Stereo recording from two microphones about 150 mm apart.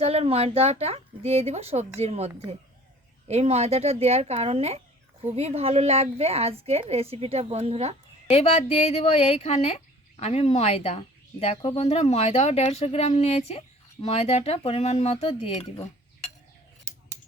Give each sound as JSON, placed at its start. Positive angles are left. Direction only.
{"t": 0.0, "sound": "a woman's voice", "side_deg": -40}
{"t": 8.3, "sound": "speech", "side_deg": 45}